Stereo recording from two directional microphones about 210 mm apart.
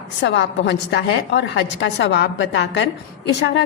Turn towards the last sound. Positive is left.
turn(degrees=55)  # may be behind; listen again after turning